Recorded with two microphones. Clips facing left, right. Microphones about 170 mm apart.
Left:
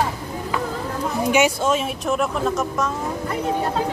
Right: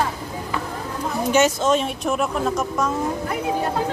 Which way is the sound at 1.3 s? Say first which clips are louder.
Right 2 dB; 10° left (ahead or behind).